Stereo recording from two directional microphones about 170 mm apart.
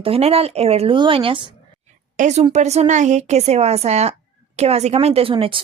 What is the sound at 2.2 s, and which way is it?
A woman's voice, 45° right (ahead or behind).